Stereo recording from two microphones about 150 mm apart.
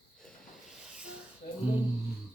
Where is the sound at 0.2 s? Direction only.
Centre (ahead or behind).